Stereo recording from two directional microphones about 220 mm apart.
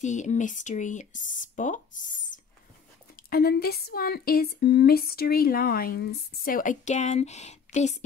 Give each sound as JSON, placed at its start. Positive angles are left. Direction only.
{"t": 0.0, "sound": "a woman's voice", "side_deg": 35}